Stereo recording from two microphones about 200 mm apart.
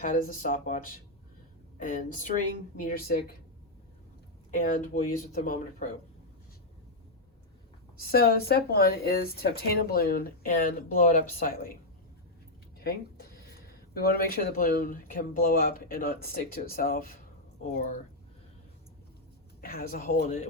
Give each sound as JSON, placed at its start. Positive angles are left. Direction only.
{"t": 0.0, "sound": "speech", "side_deg": 40}
{"t": 4.5, "sound": "speech", "side_deg": 35}
{"t": 7.9, "sound": "speech", "side_deg": 50}
{"t": 12.8, "sound": "speech", "side_deg": 50}
{"t": 19.6, "sound": "speech", "side_deg": 50}
{"t": 20.2, "sound": "speech", "side_deg": 35}